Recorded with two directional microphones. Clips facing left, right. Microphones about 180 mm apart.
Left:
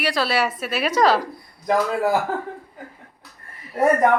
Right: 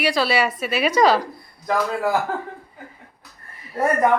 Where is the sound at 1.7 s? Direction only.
10° left (ahead or behind).